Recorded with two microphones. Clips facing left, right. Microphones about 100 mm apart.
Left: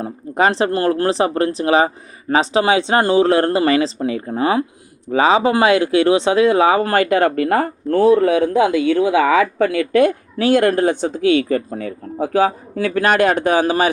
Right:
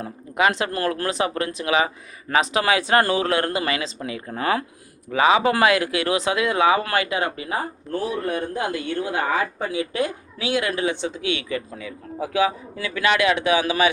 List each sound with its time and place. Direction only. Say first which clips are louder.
0.0 s speech: left 4 dB; 35° left (ahead or behind)